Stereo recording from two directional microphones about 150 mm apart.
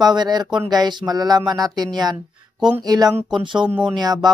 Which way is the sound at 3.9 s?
25° right (ahead or behind).